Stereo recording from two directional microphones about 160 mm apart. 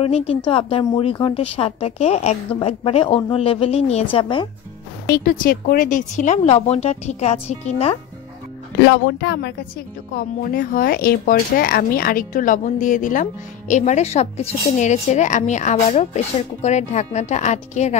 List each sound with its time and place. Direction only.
0.5 s a woman's voice: 35° left (ahead or behind)
5.1 s speech: 60° left (ahead or behind); by 8.0 s 40° left (ahead or behind)
9.0 s speech: 90° left
10.1 s speech: 75° left (ahead or behind); by 17.9 s 45° left (ahead or behind)